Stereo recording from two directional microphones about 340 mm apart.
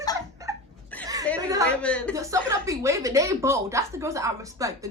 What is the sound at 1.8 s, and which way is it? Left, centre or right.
Speech, centre.